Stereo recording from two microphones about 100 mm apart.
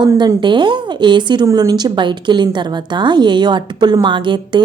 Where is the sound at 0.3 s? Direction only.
50° right (ahead or behind).